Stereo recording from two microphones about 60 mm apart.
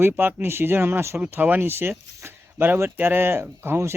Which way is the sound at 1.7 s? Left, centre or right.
Right.